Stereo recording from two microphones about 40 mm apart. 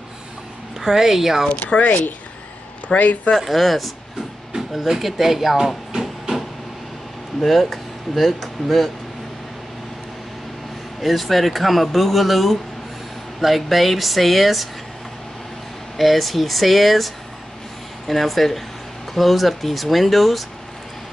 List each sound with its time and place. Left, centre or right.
0.7 s a woman's voice: centre
1.5 s speech: left
3.3 s speech: centre
4.5 s a sound: centre
7.4 s speech: centre
11.0 s speech: centre
16.0 s speech: centre